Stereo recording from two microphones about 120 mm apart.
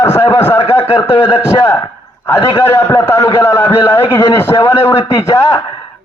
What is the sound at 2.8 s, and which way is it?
A man's voice, 20° left (ahead or behind).